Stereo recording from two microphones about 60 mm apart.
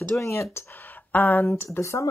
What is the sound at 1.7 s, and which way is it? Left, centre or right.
Speech, left.